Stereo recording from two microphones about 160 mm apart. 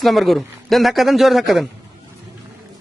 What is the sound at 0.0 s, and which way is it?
A man's voice, centre (ahead or behind).